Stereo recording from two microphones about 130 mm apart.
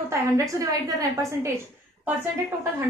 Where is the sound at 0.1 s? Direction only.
25° right (ahead or behind).